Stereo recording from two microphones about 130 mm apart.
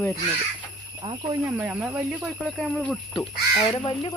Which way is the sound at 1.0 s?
35° right (ahead or behind).